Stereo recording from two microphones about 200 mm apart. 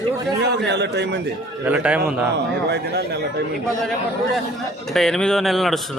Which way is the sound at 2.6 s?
55° right (ahead or behind).